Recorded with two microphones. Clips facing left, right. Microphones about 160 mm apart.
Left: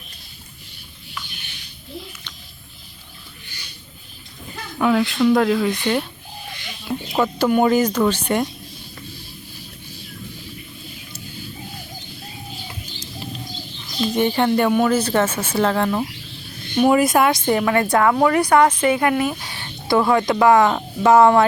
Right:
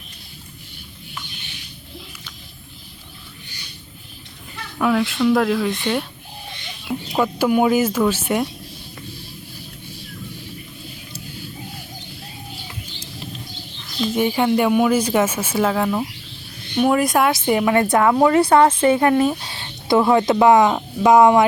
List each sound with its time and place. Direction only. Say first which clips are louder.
4.8 s speech: left 1 dB; centre (ahead or behind)
14.0 s speech: even; 5° right (ahead or behind)
17.5 s a woman's voice: right 1 dB; 15° right (ahead or behind)